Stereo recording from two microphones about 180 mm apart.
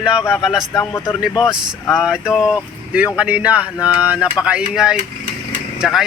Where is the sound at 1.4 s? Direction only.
Centre (ahead or behind).